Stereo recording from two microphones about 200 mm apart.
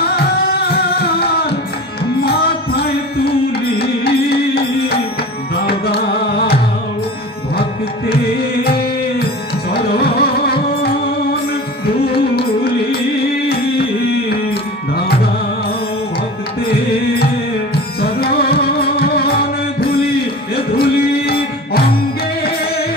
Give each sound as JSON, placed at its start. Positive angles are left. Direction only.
{"t": 0.0, "sound": "music", "side_deg": 50}
{"t": 8.1, "sound": "music", "side_deg": 50}
{"t": 14.3, "sound": "music", "side_deg": 50}
{"t": 16.6, "sound": "music", "side_deg": 50}